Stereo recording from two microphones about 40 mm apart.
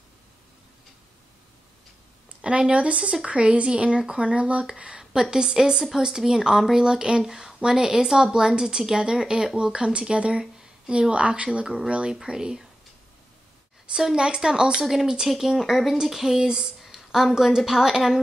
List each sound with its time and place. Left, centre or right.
2.4 s a woman's voice: right
11.6 s a woman's voice: centre
13.9 s a woman's voice: centre
15.2 s speech: centre
16.3 s a sound: centre
17.5 s a woman's voice: centre